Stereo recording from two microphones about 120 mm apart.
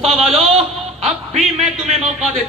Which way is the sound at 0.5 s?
60° right (ahead or behind).